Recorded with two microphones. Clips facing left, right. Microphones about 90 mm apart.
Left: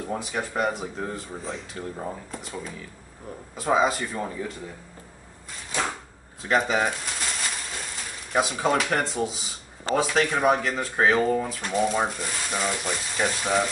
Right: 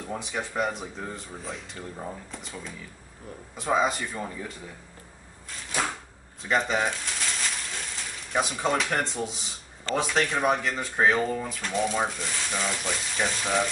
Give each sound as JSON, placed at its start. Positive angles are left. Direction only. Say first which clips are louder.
{"t": 0.0, "sound": "speech", "louder": "left 3 dB", "side_deg": 5}
{"t": 1.8, "sound": "speech", "louder": "left 4 dB", "side_deg": 10}
{"t": 3.5, "sound": "speech", "louder": "left 3 dB", "side_deg": 5}
{"t": 6.5, "sound": "pigeon", "louder": "left 2 dB", "side_deg": 5}
{"t": 8.3, "sound": "speech", "louder": "left 3 dB", "side_deg": 5}